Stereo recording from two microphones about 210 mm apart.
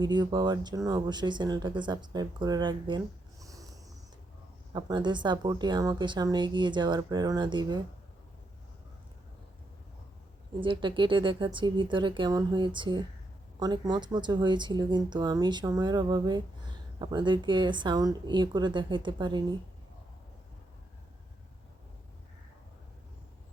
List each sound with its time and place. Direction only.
0.0 s speech: 20° right (ahead or behind)
3.4 s a sound: 15° right (ahead or behind)
4.7 s speech: 20° right (ahead or behind)
10.6 s speech: 25° right (ahead or behind)